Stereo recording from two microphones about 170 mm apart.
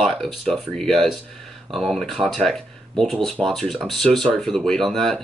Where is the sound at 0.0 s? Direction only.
Centre (ahead or behind).